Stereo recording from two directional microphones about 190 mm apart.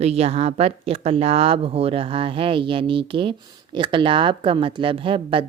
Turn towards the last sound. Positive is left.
turn(degrees=-25)  # may be behind; listen again after turning